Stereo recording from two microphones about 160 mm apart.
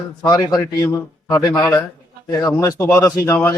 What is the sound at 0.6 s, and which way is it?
Speech, 15° left (ahead or behind).